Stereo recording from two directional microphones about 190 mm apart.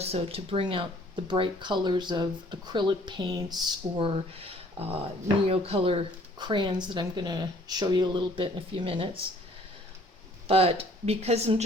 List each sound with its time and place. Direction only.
0.0 s speech: 35° right (ahead or behind)
10.5 s speech: 30° right (ahead or behind)